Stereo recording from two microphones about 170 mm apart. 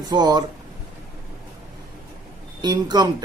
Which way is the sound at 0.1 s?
25° right (ahead or behind).